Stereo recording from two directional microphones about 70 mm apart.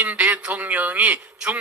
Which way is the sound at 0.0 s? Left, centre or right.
Right.